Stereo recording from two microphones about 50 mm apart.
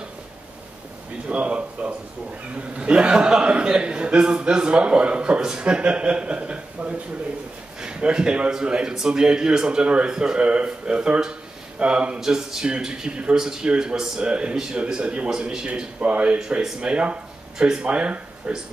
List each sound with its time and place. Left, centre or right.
1.3 s a man's voice: right
12.2 s a man's voice: centre